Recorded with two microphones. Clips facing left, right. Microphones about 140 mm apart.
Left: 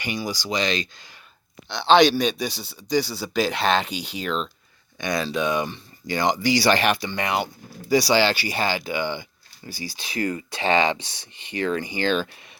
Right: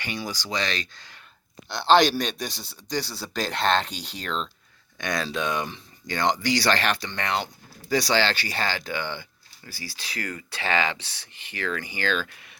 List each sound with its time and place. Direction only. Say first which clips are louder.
0.0 s speech: left 4 dB; 15° left (ahead or behind)
1.7 s speech: left 3 dB; centre (ahead or behind); by 12.3 s 20° left (ahead or behind)